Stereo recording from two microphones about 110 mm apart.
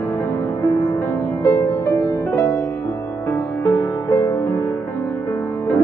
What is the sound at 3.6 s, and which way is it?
Music, 30° left (ahead or behind).